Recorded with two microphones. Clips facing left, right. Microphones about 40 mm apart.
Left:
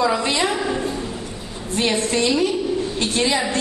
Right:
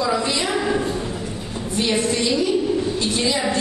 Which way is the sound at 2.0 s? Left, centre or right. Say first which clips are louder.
Left 1 dB; left.